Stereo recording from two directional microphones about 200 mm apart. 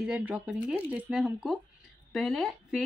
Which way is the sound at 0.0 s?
5° right (ahead or behind).